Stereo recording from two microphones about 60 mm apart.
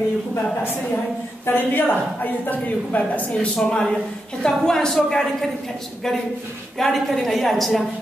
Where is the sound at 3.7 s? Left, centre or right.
Centre.